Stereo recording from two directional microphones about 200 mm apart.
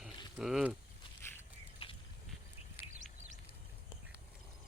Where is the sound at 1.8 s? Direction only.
25° left (ahead or behind).